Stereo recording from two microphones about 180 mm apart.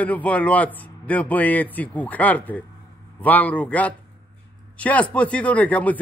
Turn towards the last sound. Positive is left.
turn(degrees=10)  # may be behind; listen again after turning